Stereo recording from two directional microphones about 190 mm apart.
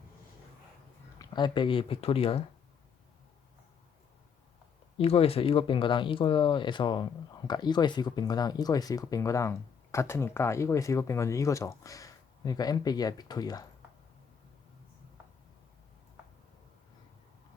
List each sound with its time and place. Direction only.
1.2 s speech: 20° left (ahead or behind)
4.9 s speech: 30° left (ahead or behind)